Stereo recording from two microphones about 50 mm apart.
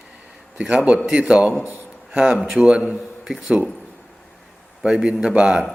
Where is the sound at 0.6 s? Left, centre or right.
Right.